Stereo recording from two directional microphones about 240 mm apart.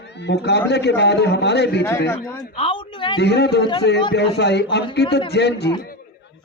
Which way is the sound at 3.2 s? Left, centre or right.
Left.